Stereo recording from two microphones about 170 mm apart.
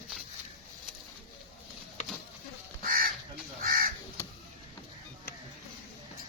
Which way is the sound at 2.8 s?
55° right (ahead or behind).